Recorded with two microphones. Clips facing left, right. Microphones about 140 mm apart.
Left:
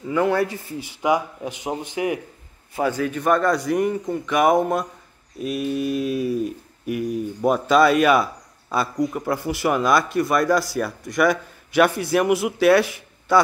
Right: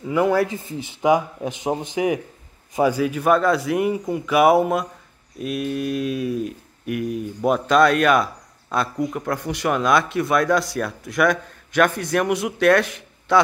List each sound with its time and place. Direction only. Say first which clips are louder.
0.1 s speech: right 1 dB; 10° right (ahead or behind)
0.6 s a man's voice: right 2 dB; 20° right (ahead or behind); by 13.4 s 5° left (ahead or behind)